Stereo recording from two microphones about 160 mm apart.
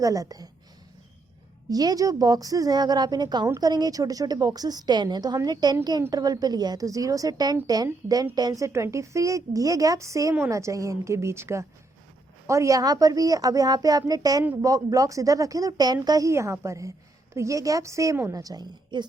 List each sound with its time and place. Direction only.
0.0 s a woman's voice: 20° right (ahead or behind)
1.7 s a woman's voice: 25° right (ahead or behind)